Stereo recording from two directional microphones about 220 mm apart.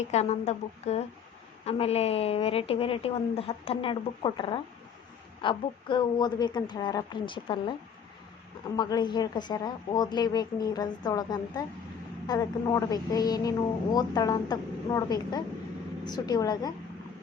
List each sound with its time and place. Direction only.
0.1 s a woman's voice: 30° left (ahead or behind)